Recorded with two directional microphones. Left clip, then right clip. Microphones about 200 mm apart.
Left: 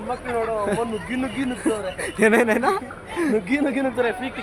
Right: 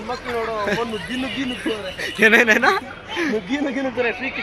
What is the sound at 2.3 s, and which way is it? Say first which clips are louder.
Speech: right 5 dB; 15° left (ahead or behind).